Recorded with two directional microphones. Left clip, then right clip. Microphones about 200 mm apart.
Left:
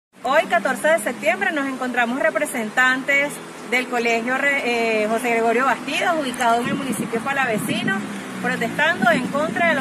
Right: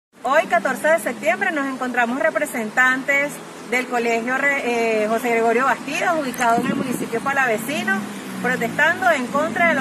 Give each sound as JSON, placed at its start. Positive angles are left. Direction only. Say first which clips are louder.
{"t": 0.4, "sound": "speech", "louder": "even", "side_deg": 10}
{"t": 7.2, "sound": "speech", "louder": "right 2 dB", "side_deg": 20}